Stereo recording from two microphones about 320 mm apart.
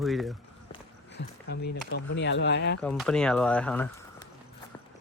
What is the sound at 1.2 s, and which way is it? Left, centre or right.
Speech, left.